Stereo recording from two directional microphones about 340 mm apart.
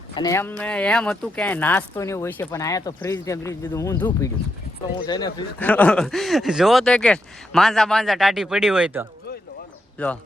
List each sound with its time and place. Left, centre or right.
0.1 s speech: centre